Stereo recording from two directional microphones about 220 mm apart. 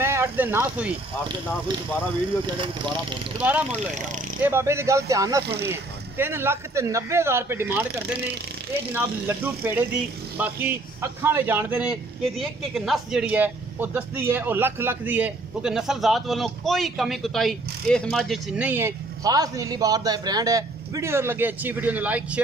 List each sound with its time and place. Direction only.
0.0 s speech: 10° right (ahead or behind)
2.4 s speech: 20° right (ahead or behind)
3.7 s speech: 30° right (ahead or behind)
4.5 s a man's voice: 10° right (ahead or behind)
8.9 s a man's voice: 10° right (ahead or behind)